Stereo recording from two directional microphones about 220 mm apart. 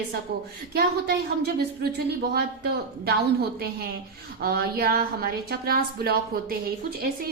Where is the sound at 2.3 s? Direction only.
45° right (ahead or behind).